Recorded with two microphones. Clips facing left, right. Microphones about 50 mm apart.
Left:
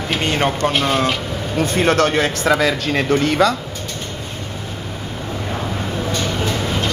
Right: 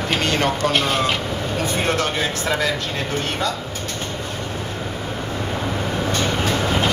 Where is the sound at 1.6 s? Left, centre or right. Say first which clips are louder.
Left 7 dB; left.